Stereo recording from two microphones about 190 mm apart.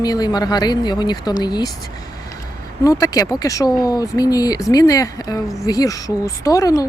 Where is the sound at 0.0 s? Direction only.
20° left (ahead or behind).